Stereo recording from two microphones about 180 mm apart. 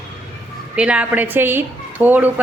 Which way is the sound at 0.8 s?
5° right (ahead or behind).